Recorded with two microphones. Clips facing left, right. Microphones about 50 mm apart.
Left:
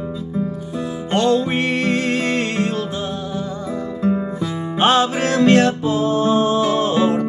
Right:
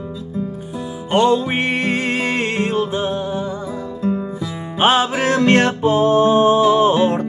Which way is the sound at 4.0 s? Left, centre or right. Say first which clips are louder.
Left 1 dB; left.